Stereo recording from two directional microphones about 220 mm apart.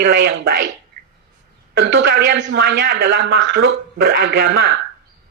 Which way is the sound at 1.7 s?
55° right (ahead or behind).